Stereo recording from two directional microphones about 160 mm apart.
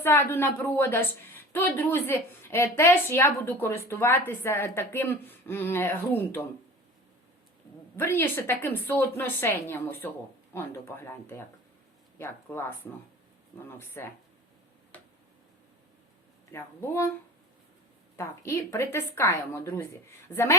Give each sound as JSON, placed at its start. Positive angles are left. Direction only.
{"t": 0.0, "sound": "a woman's voice", "side_deg": 15}
{"t": 7.9, "sound": "a woman's voice", "side_deg": 15}
{"t": 16.5, "sound": "a woman's voice", "side_deg": 15}
{"t": 18.2, "sound": "a woman's voice", "side_deg": 20}